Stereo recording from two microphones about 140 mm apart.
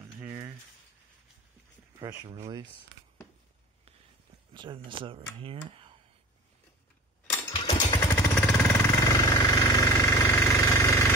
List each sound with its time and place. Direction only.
0.0 s a sound: 20° right (ahead or behind)
2.0 s speech: 25° right (ahead or behind)
4.6 s speech: 35° right (ahead or behind)
7.3 s a sound: 35° left (ahead or behind)
8.4 s vehicle: 10° left (ahead or behind)
9.0 s jackhammer: 25° left (ahead or behind)